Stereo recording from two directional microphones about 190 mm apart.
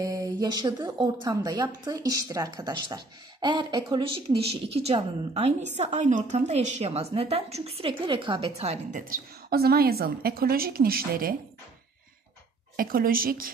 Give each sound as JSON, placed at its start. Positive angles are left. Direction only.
{"t": 0.0, "sound": "a woman's voice", "side_deg": -20}
{"t": 9.1, "sound": "a woman's voice", "side_deg": -55}
{"t": 12.7, "sound": "a woman's voice", "side_deg": -50}